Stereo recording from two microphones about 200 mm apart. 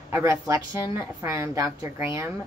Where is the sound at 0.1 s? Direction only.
15° right (ahead or behind).